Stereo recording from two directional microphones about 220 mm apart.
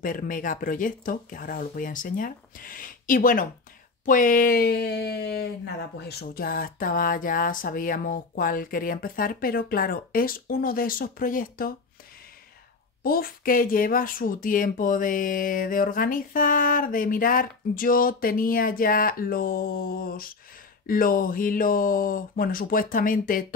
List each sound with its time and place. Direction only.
0.0 s speech: 40° left (ahead or behind)
13.0 s speech: 40° left (ahead or behind)